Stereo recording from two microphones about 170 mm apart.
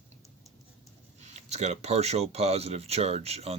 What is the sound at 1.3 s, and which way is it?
Speech, 40° right (ahead or behind).